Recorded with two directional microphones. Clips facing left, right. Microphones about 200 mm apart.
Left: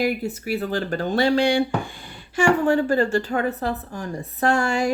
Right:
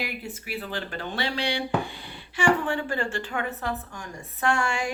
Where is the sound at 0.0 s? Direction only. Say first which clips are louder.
Left 11 dB; 40° left (ahead or behind).